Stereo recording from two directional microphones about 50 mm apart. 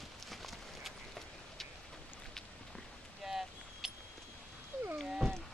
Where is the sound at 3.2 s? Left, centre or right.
Centre.